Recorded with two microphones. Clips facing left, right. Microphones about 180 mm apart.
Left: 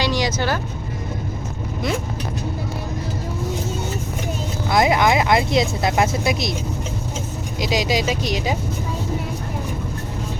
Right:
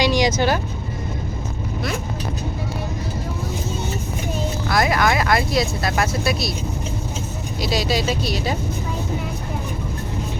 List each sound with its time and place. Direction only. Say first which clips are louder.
0.0 s vehicle: right 3 dB; 15° right (ahead or behind)
4.7 s speech: left 3 dB; 20° left (ahead or behind)
7.6 s speech: left 1 dB; 15° left (ahead or behind)